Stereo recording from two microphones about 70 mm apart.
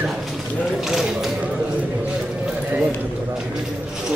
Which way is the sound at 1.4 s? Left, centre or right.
Centre.